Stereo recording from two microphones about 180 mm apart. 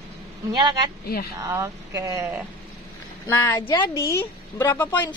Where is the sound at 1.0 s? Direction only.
60° left (ahead or behind).